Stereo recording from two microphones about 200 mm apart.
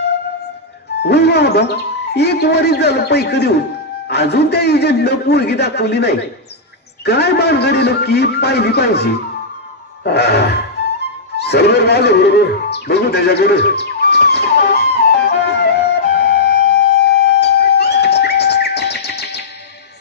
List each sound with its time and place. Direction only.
1.0 s speech: 55° left (ahead or behind)
11.3 s music: 55° left (ahead or behind)